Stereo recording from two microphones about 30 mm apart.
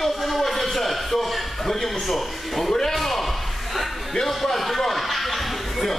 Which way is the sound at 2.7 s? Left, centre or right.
Centre.